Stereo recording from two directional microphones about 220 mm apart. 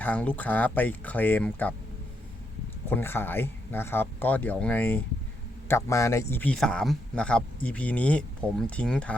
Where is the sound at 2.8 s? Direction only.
10° left (ahead or behind).